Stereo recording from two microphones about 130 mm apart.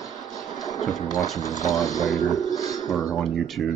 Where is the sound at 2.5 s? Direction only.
25° left (ahead or behind).